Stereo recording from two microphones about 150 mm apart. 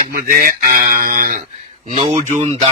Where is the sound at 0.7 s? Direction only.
65° right (ahead or behind).